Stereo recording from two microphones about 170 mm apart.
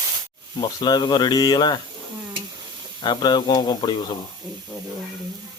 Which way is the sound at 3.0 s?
25° left (ahead or behind).